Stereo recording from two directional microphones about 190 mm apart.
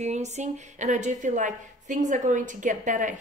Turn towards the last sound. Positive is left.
turn(degrees=-40)  # may be behind; listen again after turning